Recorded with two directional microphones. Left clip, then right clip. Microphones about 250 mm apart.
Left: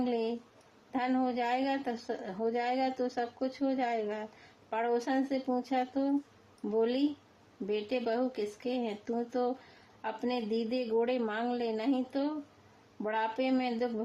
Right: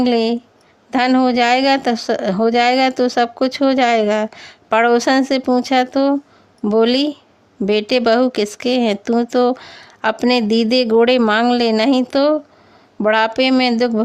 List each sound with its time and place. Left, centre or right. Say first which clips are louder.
0.0 s speech: right 17 dB; right